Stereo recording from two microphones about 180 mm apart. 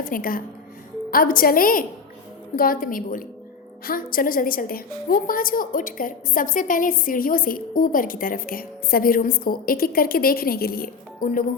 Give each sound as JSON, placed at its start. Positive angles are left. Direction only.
{"t": 0.0, "sound": "a woman's voice", "side_deg": 50}